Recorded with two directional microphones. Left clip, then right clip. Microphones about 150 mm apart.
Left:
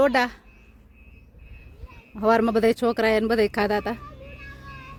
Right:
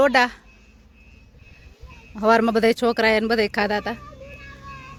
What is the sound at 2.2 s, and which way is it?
Speech, 10° left (ahead or behind).